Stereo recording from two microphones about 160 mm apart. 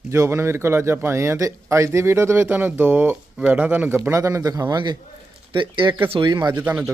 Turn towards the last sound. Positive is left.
turn(degrees=-10)  # may be behind; listen again after turning